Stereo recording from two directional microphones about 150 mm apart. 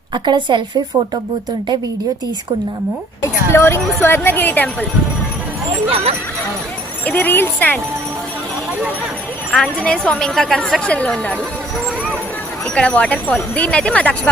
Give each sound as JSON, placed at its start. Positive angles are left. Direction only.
{"t": 0.1, "sound": "speech", "side_deg": -30}
{"t": 3.5, "sound": "speech", "side_deg": 15}
{"t": 7.0, "sound": "speech", "side_deg": 10}
{"t": 9.5, "sound": "a woman's voice", "side_deg": 5}
{"t": 12.7, "sound": "speech", "side_deg": 10}